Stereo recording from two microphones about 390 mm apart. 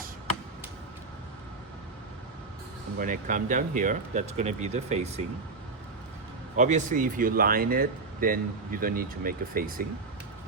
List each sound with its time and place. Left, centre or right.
3.0 s speech: centre
6.6 s speech: centre